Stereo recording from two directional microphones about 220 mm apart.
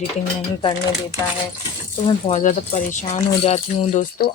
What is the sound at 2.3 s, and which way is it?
Speech, 35° left (ahead or behind).